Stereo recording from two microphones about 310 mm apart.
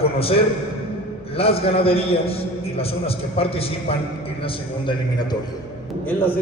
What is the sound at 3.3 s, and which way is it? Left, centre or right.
Speech, centre.